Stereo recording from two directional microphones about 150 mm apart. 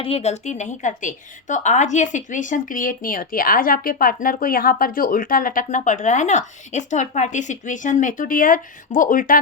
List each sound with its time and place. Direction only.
0.0 s a woman's voice: 45° left (ahead or behind); by 9.4 s 65° left (ahead or behind)